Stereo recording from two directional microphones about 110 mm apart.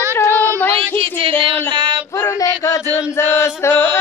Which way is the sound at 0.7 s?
55° right (ahead or behind).